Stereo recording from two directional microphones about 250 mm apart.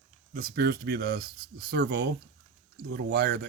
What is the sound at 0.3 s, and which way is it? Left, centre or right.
Speech, right.